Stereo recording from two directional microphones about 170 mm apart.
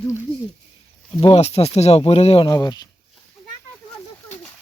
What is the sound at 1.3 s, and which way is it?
Speech, 35° left (ahead or behind).